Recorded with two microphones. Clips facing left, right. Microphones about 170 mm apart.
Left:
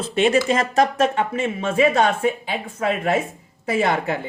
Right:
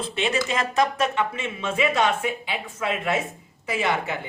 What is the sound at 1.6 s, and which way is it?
Speech, 45° left (ahead or behind).